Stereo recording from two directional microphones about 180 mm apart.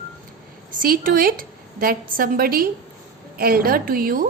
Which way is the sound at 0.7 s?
50° right (ahead or behind).